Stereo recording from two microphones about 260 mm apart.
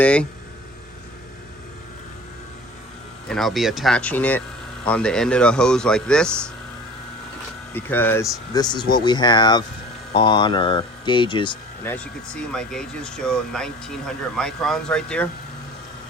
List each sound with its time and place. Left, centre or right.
0.0 s speech: centre
3.2 s speech: centre
7.7 s speech: centre
11.9 s speech: centre